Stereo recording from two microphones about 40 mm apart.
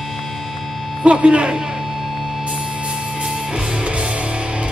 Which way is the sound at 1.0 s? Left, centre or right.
Right.